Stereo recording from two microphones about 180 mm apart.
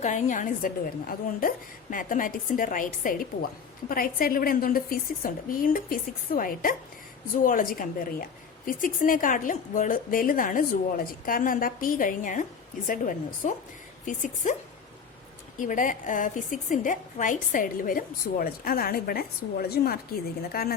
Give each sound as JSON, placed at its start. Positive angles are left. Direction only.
{"t": 0.0, "sound": "a woman's voice", "side_deg": 45}